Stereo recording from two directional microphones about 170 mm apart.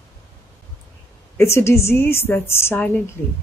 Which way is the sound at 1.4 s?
15° left (ahead or behind).